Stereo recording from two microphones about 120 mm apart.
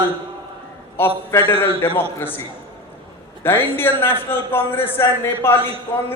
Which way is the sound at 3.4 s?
20° left (ahead or behind).